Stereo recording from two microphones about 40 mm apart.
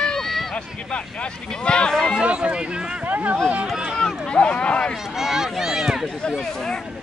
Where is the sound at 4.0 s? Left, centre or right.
Left.